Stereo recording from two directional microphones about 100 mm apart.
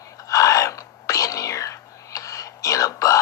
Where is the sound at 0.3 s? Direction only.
35° left (ahead or behind).